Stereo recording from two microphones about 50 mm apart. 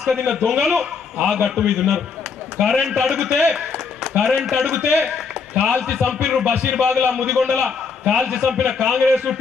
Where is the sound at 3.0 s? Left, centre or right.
Centre.